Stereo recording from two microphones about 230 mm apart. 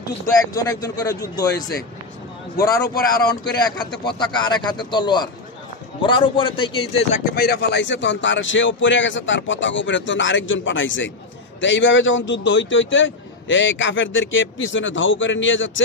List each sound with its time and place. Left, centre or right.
0.5 s speech: centre
4.0 s a man's voice: centre
7.3 s a man's voice: left